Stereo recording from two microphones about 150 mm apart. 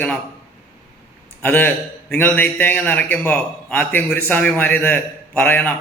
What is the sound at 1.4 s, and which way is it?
A man's voice, 10° left (ahead or behind).